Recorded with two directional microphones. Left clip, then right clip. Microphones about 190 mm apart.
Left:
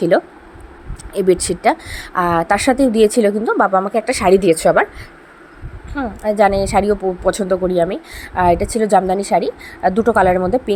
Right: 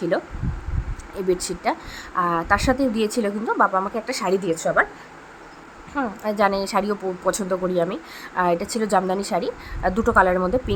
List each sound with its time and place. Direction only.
0.1 s a woman's voice: 25° left (ahead or behind)
5.9 s a woman's voice: 15° left (ahead or behind)